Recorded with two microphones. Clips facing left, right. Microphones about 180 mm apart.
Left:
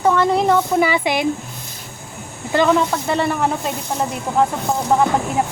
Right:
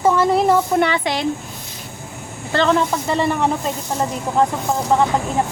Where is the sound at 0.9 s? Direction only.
15° left (ahead or behind).